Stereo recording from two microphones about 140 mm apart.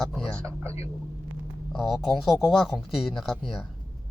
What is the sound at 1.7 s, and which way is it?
Speech, centre (ahead or behind).